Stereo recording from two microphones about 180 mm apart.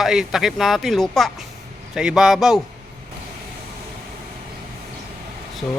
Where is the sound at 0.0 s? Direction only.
Centre (ahead or behind).